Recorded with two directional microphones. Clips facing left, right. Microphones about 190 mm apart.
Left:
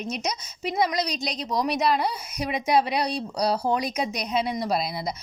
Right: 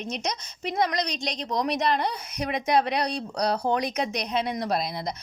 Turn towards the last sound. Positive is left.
turn(degrees=5)  # may be behind; listen again after turning